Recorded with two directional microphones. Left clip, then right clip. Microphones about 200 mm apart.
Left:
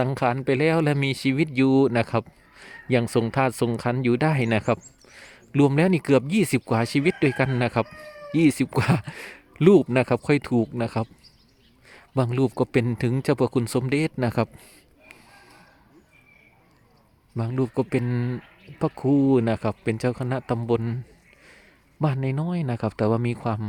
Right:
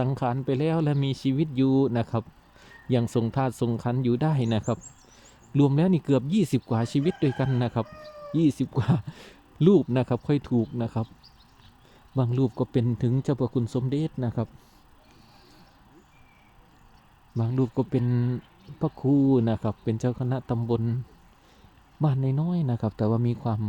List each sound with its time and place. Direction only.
0.0 s speech: 5° left (ahead or behind)
12.1 s speech: 10° left (ahead or behind)
17.3 s speech: centre (ahead or behind)
22.0 s speech: 5° left (ahead or behind)